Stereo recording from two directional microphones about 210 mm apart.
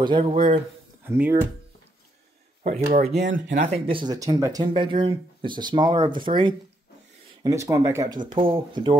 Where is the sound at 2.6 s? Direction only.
35° right (ahead or behind); by 8.2 s 15° right (ahead or behind).